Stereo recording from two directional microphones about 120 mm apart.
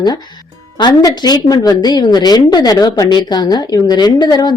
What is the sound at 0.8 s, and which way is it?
A woman's voice, 40° left (ahead or behind).